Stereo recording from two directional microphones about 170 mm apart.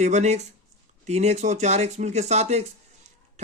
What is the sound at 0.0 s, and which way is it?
Speech, 40° right (ahead or behind).